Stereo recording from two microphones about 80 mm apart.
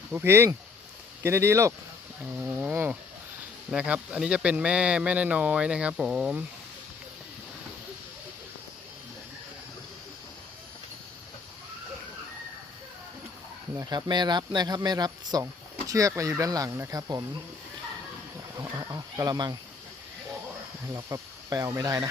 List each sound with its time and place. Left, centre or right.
0.1 s speech: right
2.2 s livestock: right
3.7 s speech: centre
13.9 s speech: right
15.9 s speech: right
18.5 s speech: right
19.3 s speech: right
20.8 s speech: right